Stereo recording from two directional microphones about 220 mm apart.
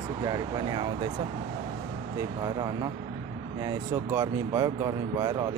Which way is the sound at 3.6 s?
15° right (ahead or behind).